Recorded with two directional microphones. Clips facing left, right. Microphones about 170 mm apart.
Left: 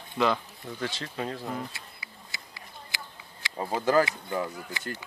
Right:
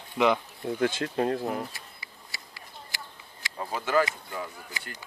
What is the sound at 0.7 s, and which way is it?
Speech, 50° right (ahead or behind).